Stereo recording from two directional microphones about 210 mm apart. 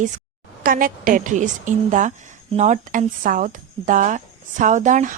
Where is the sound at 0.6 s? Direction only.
40° right (ahead or behind).